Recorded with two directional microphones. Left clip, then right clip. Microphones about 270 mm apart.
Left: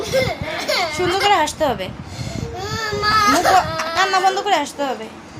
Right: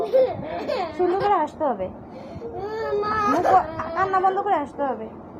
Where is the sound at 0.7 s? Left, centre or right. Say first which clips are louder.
Left 4 dB; centre.